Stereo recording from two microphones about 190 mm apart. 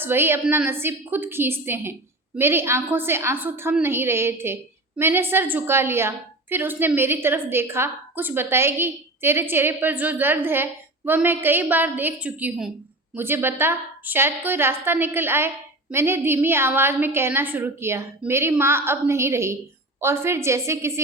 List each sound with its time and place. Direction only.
0.0 s a woman's voice: 10° right (ahead or behind)